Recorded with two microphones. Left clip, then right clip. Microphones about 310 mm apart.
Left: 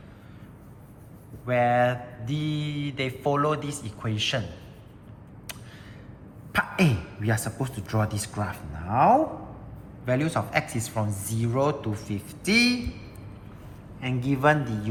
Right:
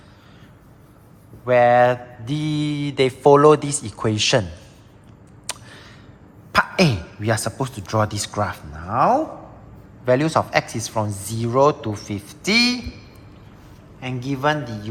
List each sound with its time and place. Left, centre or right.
1.5 s mantra: centre
6.5 s a man's voice: centre
10.1 s mantra: centre
14.0 s mantra: centre